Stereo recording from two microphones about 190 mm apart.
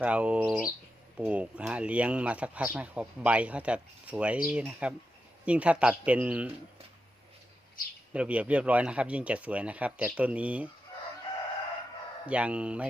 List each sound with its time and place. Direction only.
0.0 s speech: 5° right (ahead or behind)
8.1 s speech: 5° right (ahead or behind)
12.2 s speech: 5° right (ahead or behind)